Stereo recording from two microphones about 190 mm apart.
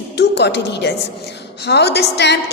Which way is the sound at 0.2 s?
65° left (ahead or behind).